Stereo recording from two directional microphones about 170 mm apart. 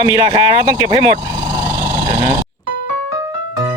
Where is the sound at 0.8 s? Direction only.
25° right (ahead or behind).